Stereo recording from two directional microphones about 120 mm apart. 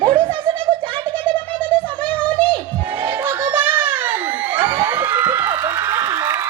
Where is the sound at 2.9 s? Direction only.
15° right (ahead or behind).